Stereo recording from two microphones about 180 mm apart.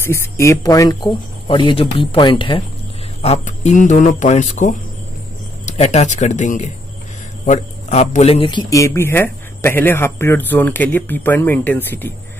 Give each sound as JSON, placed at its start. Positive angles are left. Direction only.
{"t": 0.0, "sound": "speech", "side_deg": 15}
{"t": 3.2, "sound": "speech", "side_deg": 40}